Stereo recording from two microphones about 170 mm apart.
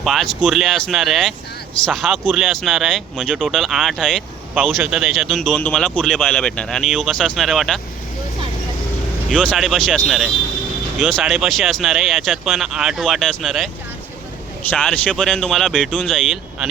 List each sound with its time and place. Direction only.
0.0 s speech: centre (ahead or behind)
9.3 s speech: centre (ahead or behind)
14.7 s speech: 5° left (ahead or behind)